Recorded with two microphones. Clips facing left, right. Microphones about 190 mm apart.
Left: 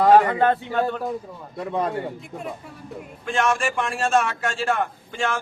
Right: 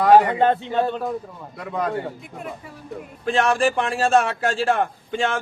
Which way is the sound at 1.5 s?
30° left (ahead or behind).